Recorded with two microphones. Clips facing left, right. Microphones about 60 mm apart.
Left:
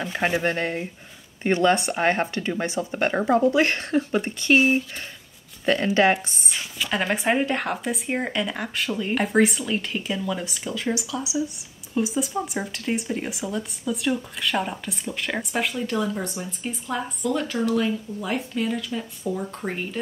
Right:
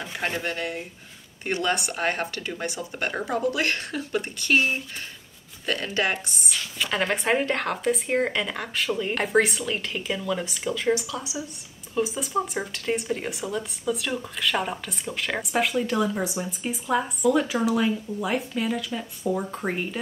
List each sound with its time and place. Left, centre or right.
0.1 s speech: left
5.7 s speech: left
6.8 s speech: centre
13.4 s speech: centre
13.8 s speech: centre